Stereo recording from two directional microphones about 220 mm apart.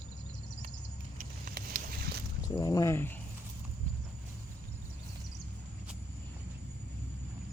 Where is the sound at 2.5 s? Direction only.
15° left (ahead or behind).